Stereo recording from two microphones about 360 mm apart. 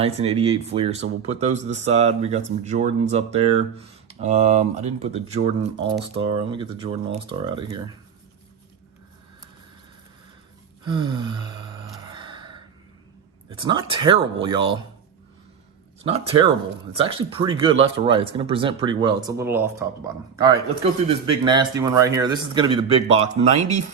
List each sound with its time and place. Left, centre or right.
0.0 s speech: centre
10.8 s gasp: centre
13.5 s speech: centre
16.0 s speech: centre